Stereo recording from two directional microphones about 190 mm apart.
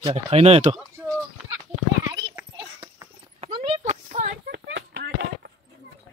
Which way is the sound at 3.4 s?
30° right (ahead or behind).